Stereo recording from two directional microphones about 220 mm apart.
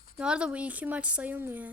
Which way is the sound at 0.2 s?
5° right (ahead or behind).